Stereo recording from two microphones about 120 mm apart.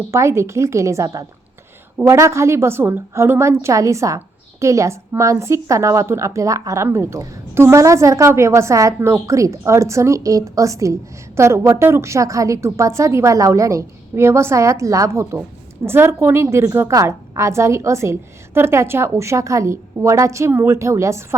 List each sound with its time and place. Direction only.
0.1 s a woman's voice: 25° right (ahead or behind)